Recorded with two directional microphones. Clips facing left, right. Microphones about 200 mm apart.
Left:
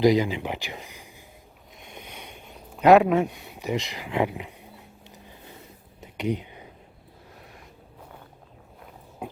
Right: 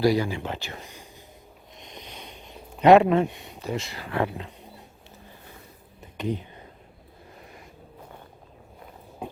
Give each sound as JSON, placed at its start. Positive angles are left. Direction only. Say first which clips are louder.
{"t": 0.0, "sound": "speech", "louder": "left 2 dB", "side_deg": 20}
{"t": 1.8, "sound": "a sound", "louder": "even", "side_deg": 10}
{"t": 2.8, "sound": "speech", "louder": "right 1 dB", "side_deg": 0}
{"t": 3.6, "sound": "speech", "louder": "left 2 dB", "side_deg": 15}
{"t": 6.0, "sound": "whispering", "louder": "left 2 dB", "side_deg": 15}